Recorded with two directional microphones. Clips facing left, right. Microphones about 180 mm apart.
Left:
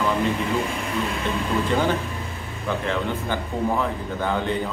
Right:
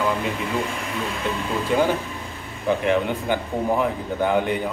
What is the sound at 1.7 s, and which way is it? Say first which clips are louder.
Speech: right 4 dB; 15° right (ahead or behind).